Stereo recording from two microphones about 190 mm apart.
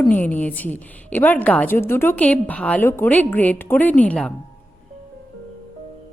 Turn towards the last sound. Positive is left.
turn(degrees=5)  # may be behind; listen again after turning